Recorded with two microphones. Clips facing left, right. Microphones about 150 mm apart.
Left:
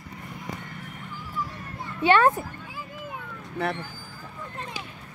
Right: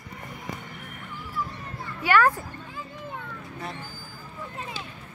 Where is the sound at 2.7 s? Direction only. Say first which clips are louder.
Even; 5° left (ahead or behind).